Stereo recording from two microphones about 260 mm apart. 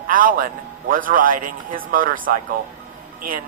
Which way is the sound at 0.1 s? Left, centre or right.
Right.